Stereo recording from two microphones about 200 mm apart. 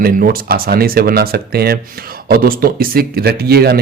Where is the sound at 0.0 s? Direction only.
45° right (ahead or behind).